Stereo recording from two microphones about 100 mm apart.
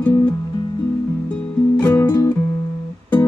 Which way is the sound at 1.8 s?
20° left (ahead or behind).